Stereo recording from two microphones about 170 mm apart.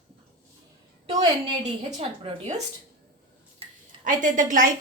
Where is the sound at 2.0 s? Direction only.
35° right (ahead or behind).